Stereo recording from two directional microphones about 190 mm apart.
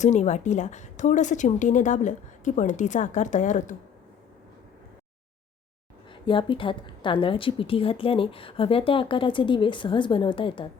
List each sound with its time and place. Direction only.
0.0 s a woman's voice: 40° left (ahead or behind)
6.1 s a woman's voice: 25° left (ahead or behind)